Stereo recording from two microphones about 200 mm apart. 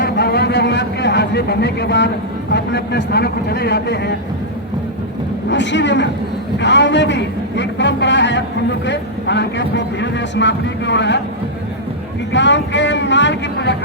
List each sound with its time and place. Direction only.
0.0 s a sound: 55° left (ahead or behind)
2.5 s speech: 55° left (ahead or behind)
5.5 s speech: 60° left (ahead or behind)
12.3 s speech: 60° left (ahead or behind)